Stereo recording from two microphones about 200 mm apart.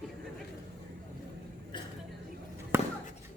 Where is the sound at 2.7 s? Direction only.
10° right (ahead or behind).